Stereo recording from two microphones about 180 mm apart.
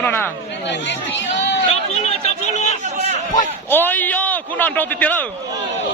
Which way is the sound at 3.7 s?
10° left (ahead or behind).